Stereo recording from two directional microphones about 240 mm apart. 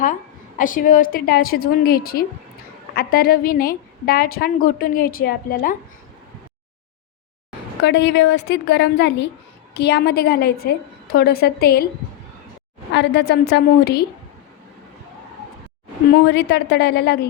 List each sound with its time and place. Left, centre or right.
0.6 s a woman's voice: left
7.9 s a woman's voice: left
12.9 s a woman's voice: left
16.1 s a woman's voice: left